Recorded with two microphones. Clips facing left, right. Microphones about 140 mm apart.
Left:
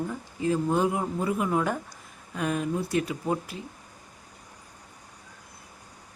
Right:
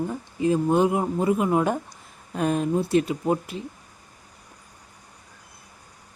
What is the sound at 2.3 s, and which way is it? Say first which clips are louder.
Speech: right 5 dB; 35° right (ahead or behind).